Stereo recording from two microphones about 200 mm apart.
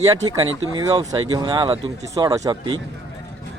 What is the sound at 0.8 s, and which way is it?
Speech, 20° right (ahead or behind).